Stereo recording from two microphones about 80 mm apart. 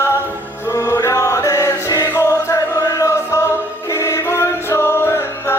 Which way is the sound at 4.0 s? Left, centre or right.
Left.